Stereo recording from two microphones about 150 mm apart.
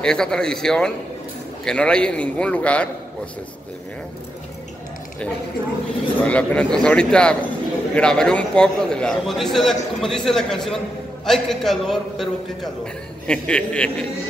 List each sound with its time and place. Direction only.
0.0 s a man's voice: 5° left (ahead or behind)
6.2 s a man's voice: 10° left (ahead or behind)